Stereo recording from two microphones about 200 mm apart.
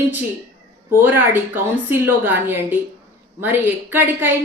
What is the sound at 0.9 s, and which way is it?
Speech, 10° right (ahead or behind).